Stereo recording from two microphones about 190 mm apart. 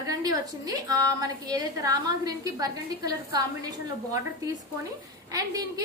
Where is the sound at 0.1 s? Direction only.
20° right (ahead or behind).